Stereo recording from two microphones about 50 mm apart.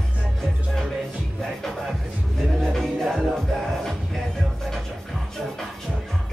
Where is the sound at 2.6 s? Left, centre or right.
Centre.